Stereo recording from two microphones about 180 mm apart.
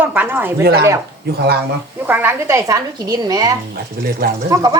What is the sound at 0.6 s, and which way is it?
Speech, 60° right (ahead or behind).